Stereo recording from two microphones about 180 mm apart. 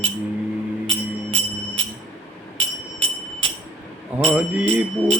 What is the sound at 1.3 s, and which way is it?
Music, 30° right (ahead or behind).